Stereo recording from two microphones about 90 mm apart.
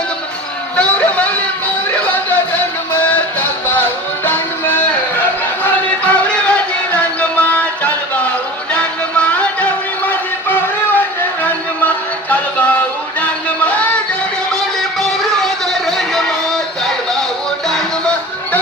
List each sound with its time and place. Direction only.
0.8 s a sound: 15° left (ahead or behind)
2.0 s music: 20° left (ahead or behind)
4.3 s music: 20° left (ahead or behind)
14.5 s music: 5° left (ahead or behind)